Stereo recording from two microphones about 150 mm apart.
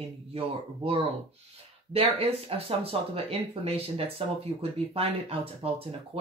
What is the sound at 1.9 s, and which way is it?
Speech, 40° right (ahead or behind).